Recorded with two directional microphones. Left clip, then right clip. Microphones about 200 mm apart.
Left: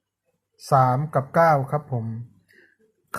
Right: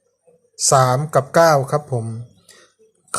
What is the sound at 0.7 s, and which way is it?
Speech, 15° right (ahead or behind).